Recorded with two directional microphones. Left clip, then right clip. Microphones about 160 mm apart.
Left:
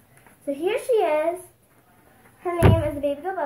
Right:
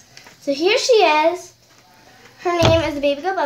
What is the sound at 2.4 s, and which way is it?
Speech, 35° right (ahead or behind).